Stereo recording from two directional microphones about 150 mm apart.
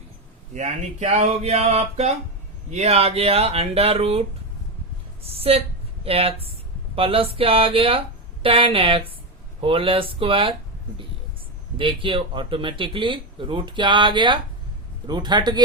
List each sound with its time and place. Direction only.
0.5 s speech: 50° right (ahead or behind)
11.8 s a man's voice: 35° right (ahead or behind)